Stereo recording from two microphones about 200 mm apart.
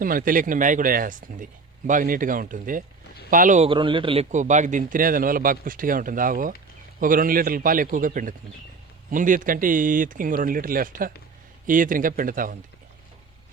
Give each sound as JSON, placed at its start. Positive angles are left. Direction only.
{"t": 0.0, "sound": "a man's voice", "side_deg": -45}
{"t": 3.7, "sound": "a man's voice", "side_deg": -25}